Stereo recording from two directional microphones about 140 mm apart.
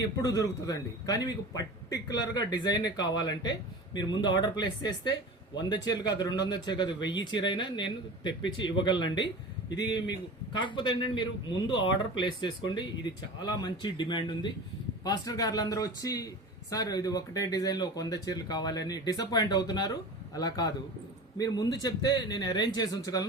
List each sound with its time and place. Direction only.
0.2 s a man's voice: 25° left (ahead or behind)